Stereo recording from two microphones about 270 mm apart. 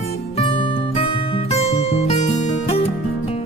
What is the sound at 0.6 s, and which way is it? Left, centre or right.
Music, centre.